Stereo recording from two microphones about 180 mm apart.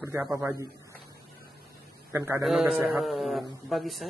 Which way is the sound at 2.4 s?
Centre (ahead or behind).